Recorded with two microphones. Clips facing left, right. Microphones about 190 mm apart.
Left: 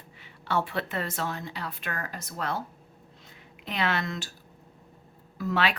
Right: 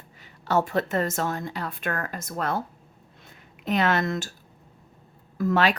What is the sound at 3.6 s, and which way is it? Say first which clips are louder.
Speech: right 6 dB; 45° right (ahead or behind).